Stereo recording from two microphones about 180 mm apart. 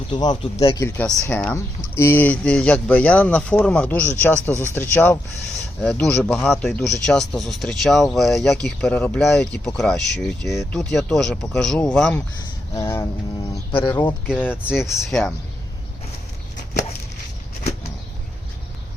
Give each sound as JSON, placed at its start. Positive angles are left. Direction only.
{"t": 0.1, "sound": "speech", "side_deg": 25}
{"t": 12.7, "sound": "speech", "side_deg": 15}
{"t": 14.3, "sound": "speech", "side_deg": -5}